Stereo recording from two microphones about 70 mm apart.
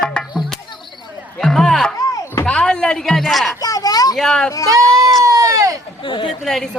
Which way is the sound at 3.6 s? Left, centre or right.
Left.